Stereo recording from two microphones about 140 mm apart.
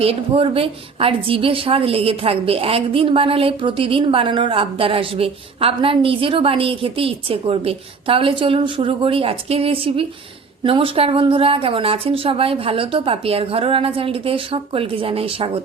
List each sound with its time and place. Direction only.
0.0 s a woman's voice: 45° right (ahead or behind)